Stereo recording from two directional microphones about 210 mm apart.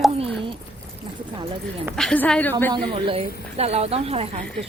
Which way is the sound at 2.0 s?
5° left (ahead or behind).